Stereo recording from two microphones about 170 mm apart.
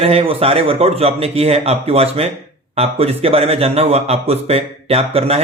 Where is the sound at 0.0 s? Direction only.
35° right (ahead or behind).